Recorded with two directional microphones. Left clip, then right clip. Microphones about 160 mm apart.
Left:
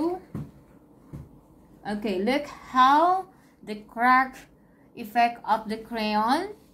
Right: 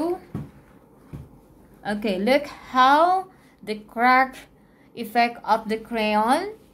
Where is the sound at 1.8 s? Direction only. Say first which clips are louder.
Right 5 dB; 55° right (ahead or behind).